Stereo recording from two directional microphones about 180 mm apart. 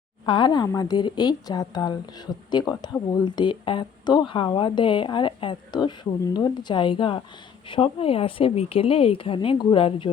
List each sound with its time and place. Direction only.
0.3 s a woman's voice: 25° left (ahead or behind)